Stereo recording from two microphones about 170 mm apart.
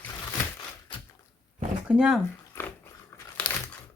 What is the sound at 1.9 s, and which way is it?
Speech, 5° right (ahead or behind).